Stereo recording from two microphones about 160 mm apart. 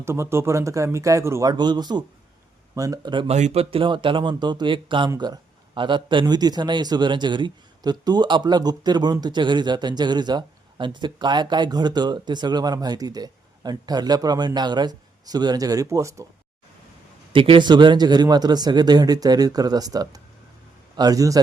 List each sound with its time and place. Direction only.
0.0 s a man's voice: 15° right (ahead or behind)
3.3 s a man's voice: 45° right (ahead or behind); by 16.2 s 20° right (ahead or behind)
17.3 s a man's voice: 35° right (ahead or behind)